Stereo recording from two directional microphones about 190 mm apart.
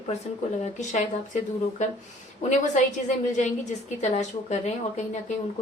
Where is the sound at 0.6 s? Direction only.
40° left (ahead or behind).